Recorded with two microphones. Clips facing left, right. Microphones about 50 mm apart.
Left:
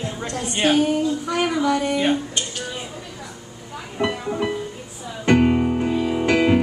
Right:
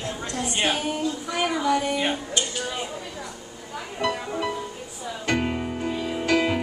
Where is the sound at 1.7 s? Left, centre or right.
Centre.